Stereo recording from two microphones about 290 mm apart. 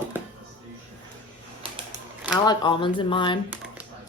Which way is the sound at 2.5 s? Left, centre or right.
Centre.